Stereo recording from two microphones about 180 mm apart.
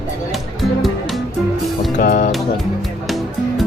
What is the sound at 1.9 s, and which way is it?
Music, 45° left (ahead or behind).